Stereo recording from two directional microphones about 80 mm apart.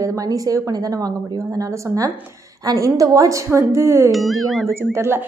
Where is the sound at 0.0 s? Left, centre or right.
Right.